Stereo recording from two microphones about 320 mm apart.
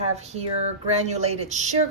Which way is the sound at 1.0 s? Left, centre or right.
Centre.